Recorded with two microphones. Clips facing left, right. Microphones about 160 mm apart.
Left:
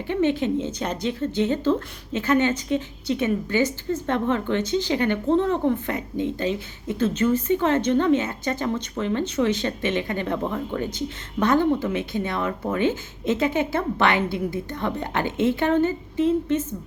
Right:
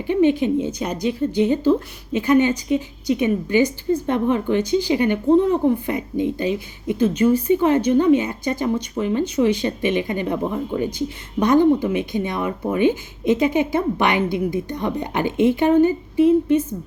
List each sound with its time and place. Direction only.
0.1 s a woman's voice: 15° right (ahead or behind)